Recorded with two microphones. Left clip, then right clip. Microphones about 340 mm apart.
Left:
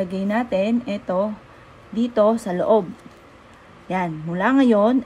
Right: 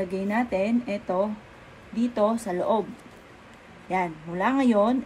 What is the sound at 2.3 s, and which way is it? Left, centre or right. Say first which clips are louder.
Speech: left 5 dB; left.